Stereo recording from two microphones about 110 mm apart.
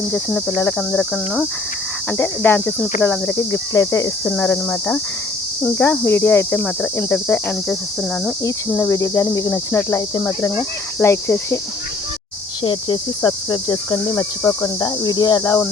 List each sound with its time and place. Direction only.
0.1 s speech: 5° left (ahead or behind)
2.1 s speech: 15° left (ahead or behind)
3.3 s speech: 30° left (ahead or behind)
4.3 s speech: 15° left (ahead or behind)
8.9 s cricket: 30° left (ahead or behind)
9.7 s speech: 25° left (ahead or behind)
12.6 s cricket: 45° left (ahead or behind)